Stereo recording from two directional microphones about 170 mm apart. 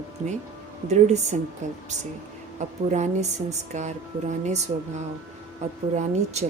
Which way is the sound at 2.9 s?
45° right (ahead or behind).